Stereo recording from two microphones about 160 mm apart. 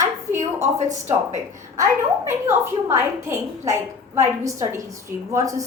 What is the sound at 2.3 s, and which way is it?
A woman's voice, 15° right (ahead or behind).